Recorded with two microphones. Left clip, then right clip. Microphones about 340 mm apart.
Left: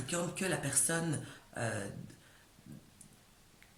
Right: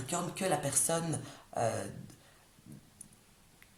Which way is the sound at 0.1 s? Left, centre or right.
Centre.